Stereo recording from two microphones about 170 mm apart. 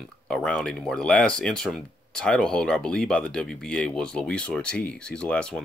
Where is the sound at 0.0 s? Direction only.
5° left (ahead or behind).